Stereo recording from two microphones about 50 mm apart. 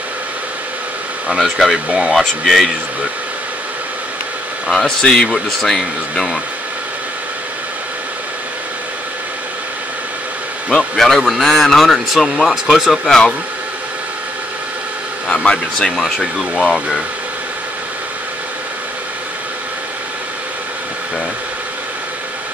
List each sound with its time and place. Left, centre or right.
1.4 s speech: centre
4.6 s speech: centre
10.7 s speech: centre
15.4 s speech: centre
16.2 s speech: centre